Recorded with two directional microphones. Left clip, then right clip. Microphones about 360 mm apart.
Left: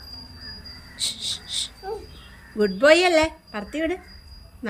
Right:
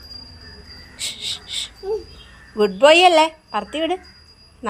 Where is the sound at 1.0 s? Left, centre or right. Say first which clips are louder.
Right 1 dB; centre.